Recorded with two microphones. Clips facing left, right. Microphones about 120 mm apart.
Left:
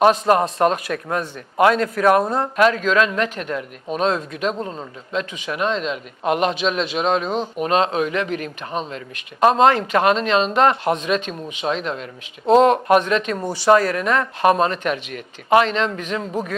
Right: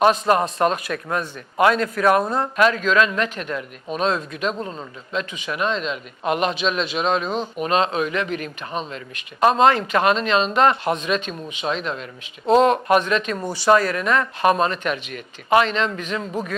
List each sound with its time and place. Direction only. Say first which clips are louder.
0.0 s speech: left 2 dB; 55° left (ahead or behind)
2.2 s speech: left 1 dB; 40° left (ahead or behind)
2.6 s speech: left 1 dB; 55° left (ahead or behind)
7.3 s speech: left 2 dB; 20° left (ahead or behind)
7.6 s speech: left 2 dB; 55° left (ahead or behind)